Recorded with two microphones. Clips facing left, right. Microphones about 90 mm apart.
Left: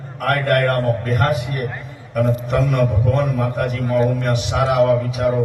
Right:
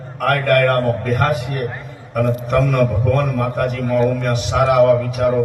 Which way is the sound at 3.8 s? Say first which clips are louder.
Right 1 dB; 30° left (ahead or behind).